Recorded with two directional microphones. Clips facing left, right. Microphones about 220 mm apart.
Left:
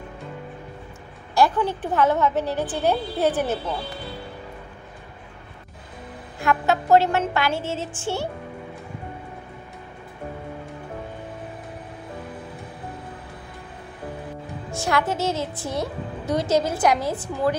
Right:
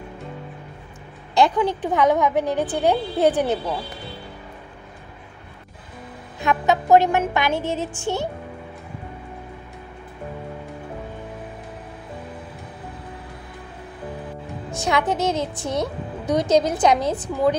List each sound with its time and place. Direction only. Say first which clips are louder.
1.3 s a woman's voice: right 2 dB; 15° right (ahead or behind)
6.4 s a woman's voice: right 1 dB; 20° right (ahead or behind)
14.7 s a woman's voice: right 2 dB; 20° right (ahead or behind)